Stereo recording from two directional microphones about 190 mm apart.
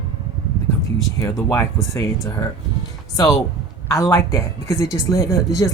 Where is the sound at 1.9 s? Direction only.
20° left (ahead or behind).